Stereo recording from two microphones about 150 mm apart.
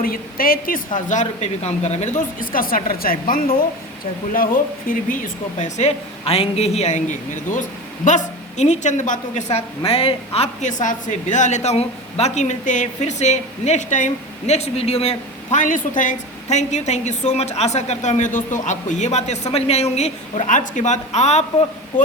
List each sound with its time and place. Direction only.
0.0 s a woman's voice: 75° left (ahead or behind)
0.9 s a woman's voice: 55° left (ahead or behind)